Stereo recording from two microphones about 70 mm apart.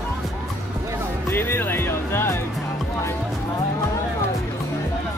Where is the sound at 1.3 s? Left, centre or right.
Left.